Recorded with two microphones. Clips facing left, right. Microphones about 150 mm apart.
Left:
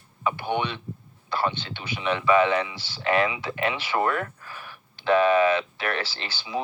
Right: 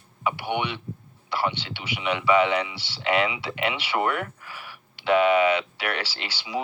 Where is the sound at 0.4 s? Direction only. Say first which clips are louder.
Left 1 dB; 15° right (ahead or behind).